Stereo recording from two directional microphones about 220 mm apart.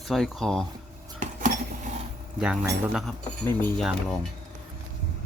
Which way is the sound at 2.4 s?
5° right (ahead or behind).